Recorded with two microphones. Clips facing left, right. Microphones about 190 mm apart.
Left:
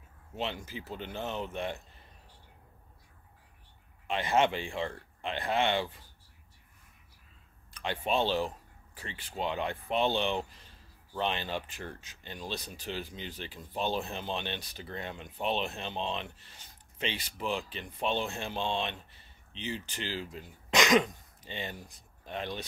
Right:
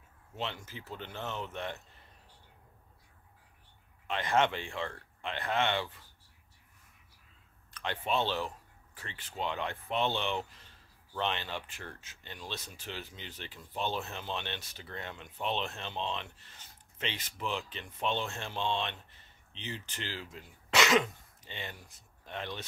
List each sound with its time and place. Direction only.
0.4 s speech: 15° left (ahead or behind)
4.1 s speech: 10° left (ahead or behind)
7.7 s speech: 10° left (ahead or behind)
12.5 s speech: 35° left (ahead or behind)
12.8 s speech: 15° left (ahead or behind)